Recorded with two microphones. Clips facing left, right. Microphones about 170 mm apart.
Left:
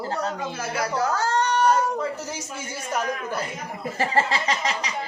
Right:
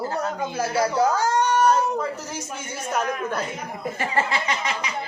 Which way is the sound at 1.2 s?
10° right (ahead or behind).